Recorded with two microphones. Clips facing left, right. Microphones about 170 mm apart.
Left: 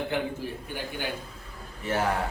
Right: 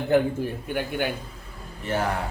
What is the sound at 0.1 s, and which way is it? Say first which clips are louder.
Speech: right 11 dB; 45° right (ahead or behind).